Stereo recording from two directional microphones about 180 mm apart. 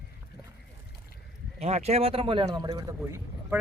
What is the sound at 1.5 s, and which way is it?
Speech, 40° right (ahead or behind).